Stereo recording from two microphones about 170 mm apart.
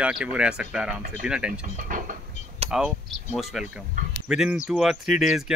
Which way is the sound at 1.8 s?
55° right (ahead or behind).